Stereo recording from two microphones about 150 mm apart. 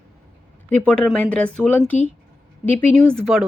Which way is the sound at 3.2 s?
Centre (ahead or behind).